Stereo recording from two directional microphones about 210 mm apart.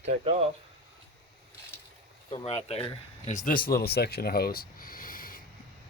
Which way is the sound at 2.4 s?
30° left (ahead or behind).